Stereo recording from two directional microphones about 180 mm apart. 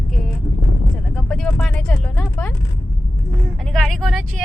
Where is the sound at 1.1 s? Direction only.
5° left (ahead or behind).